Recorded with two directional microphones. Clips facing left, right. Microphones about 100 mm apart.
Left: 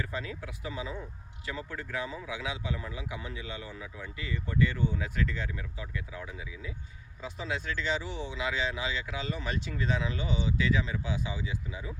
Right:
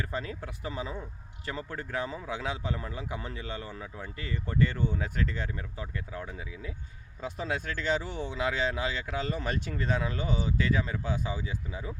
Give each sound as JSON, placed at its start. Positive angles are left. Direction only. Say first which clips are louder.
{"t": 0.0, "sound": "speech", "louder": "right 2 dB", "side_deg": -40}